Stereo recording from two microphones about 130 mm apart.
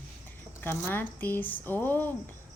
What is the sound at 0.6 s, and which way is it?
Speech, 15° left (ahead or behind).